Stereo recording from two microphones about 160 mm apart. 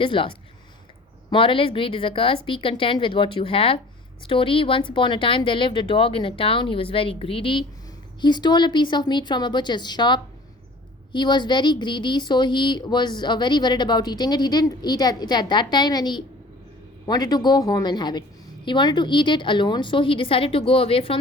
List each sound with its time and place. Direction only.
0.0 s a woman's voice: 30° left (ahead or behind)